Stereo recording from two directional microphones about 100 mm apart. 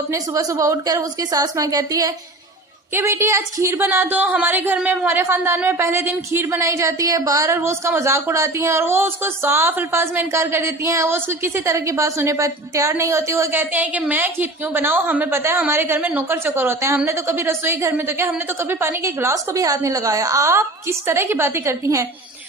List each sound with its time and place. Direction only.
0.1 s a woman's voice: 35° right (ahead or behind)
2.9 s a woman's voice: 25° right (ahead or behind)